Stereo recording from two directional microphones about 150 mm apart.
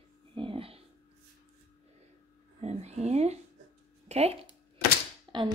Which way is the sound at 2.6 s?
45° right (ahead or behind).